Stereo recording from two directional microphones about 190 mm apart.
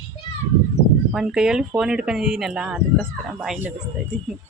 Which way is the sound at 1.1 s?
Centre (ahead or behind).